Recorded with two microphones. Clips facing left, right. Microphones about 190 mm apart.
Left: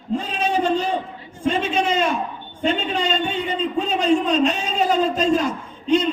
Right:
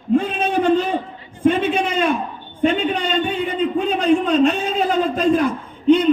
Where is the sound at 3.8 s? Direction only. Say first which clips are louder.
Right 1 dB; 55° right (ahead or behind).